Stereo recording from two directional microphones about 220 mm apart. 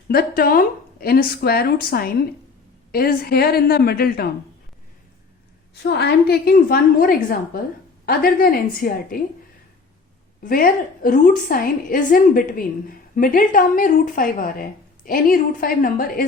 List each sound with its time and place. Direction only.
0.1 s a woman's voice: 40° left (ahead or behind)
5.8 s a woman's voice: 45° left (ahead or behind)
10.4 s speech: 40° left (ahead or behind)